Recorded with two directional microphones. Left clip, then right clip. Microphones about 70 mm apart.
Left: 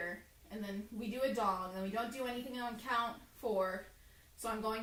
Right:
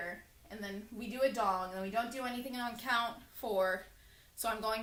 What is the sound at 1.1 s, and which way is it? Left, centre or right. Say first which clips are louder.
A woman's voice: right 3 dB; centre.